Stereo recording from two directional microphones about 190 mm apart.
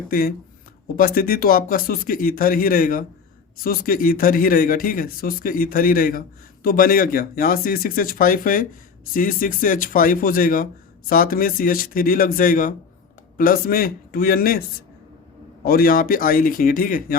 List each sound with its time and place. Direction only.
0.1 s speech: 50° left (ahead or behind)
15.6 s speech: 50° left (ahead or behind)